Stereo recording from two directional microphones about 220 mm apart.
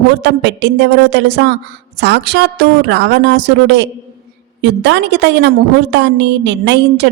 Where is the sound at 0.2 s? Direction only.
50° right (ahead or behind).